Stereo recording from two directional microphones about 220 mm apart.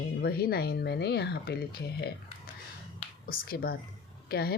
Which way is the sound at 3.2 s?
45° left (ahead or behind).